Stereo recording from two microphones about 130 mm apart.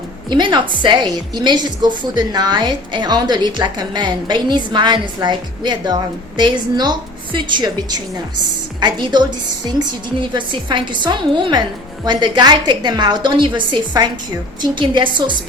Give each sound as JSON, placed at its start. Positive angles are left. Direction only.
{"t": 0.3, "sound": "a woman's voice", "side_deg": -35}